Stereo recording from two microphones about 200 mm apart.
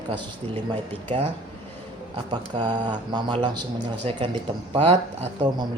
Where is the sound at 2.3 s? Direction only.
20° right (ahead or behind).